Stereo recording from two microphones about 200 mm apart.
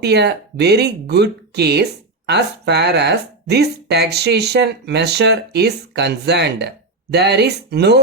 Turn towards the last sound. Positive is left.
turn(degrees=-55)  # may be behind; listen again after turning